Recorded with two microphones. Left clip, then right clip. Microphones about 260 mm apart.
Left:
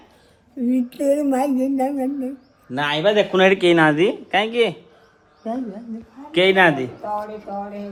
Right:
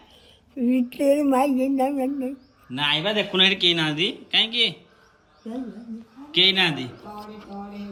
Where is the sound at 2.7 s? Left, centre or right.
Centre.